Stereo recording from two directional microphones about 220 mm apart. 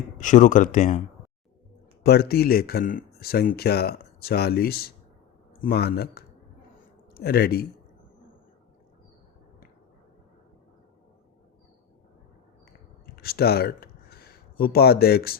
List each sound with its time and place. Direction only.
0.2 s speech: 35° left (ahead or behind)
2.0 s speech: 45° left (ahead or behind)
13.1 s speech: 45° left (ahead or behind)